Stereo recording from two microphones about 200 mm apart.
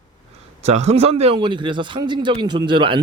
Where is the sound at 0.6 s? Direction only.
30° right (ahead or behind).